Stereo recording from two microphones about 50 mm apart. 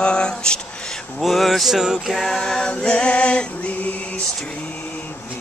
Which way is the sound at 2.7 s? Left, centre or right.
Left.